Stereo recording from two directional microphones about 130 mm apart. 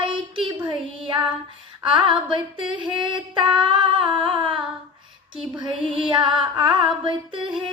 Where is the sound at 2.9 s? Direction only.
40° right (ahead or behind).